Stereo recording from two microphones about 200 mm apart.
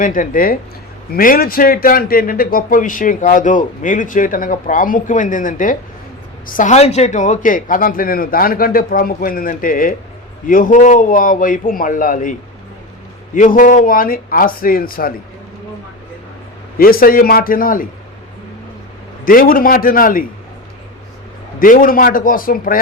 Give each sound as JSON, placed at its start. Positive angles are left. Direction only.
{"t": 0.0, "sound": "a man's voice", "side_deg": 45}
{"t": 13.3, "sound": "a man's voice", "side_deg": 40}
{"t": 16.7, "sound": "a man's voice", "side_deg": 45}
{"t": 19.2, "sound": "a man's voice", "side_deg": 45}
{"t": 21.6, "sound": "a man's voice", "side_deg": 45}